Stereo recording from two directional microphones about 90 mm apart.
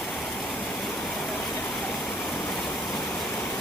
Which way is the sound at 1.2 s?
10° left (ahead or behind).